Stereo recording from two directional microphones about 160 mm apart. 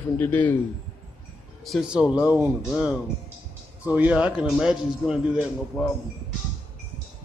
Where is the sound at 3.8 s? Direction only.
10° right (ahead or behind).